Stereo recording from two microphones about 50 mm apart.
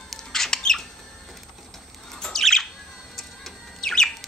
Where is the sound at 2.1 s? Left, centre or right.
Centre.